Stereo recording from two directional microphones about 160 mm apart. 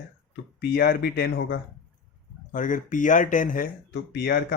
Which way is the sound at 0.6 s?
85° left.